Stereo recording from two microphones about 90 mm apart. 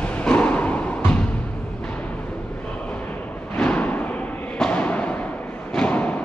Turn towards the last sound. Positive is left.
turn(degrees=15)  # may be behind; listen again after turning